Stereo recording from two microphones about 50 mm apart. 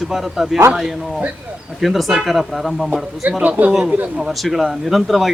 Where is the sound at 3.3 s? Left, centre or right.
Right.